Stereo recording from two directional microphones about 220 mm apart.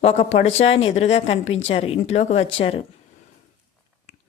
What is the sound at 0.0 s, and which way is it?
Speech, 30° left (ahead or behind).